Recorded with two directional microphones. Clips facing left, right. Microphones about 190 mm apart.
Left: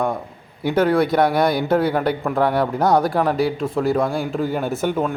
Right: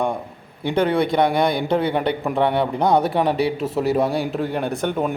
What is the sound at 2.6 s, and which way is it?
A man's voice, centre (ahead or behind).